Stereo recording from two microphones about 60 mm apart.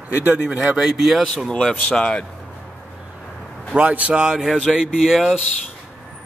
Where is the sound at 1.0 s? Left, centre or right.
Centre.